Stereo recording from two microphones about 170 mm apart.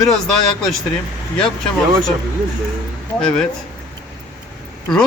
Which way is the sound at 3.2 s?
5° left (ahead or behind).